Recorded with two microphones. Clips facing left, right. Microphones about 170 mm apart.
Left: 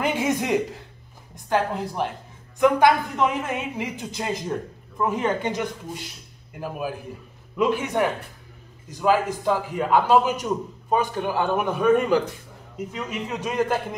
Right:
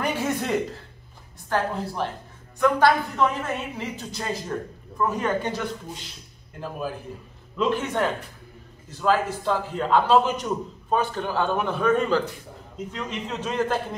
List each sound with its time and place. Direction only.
0.0 s a man's voice: 15° left (ahead or behind)